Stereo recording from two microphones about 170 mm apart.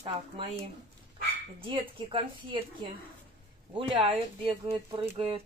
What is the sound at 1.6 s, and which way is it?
Speech, 30° right (ahead or behind).